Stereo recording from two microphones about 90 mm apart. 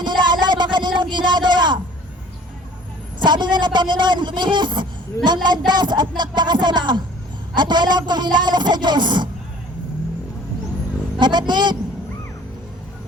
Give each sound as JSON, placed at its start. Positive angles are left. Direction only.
{"t": 0.0, "sound": "a sound", "side_deg": -55}
{"t": 3.2, "sound": "speech", "side_deg": -55}
{"t": 11.2, "sound": "speech", "side_deg": -55}